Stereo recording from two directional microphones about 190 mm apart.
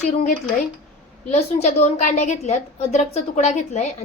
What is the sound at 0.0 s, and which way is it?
A woman's voice, 40° left (ahead or behind).